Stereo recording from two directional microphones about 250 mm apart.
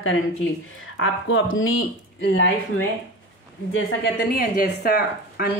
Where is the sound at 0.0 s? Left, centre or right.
Left.